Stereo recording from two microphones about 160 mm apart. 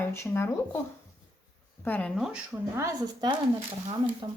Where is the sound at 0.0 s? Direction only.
15° left (ahead or behind).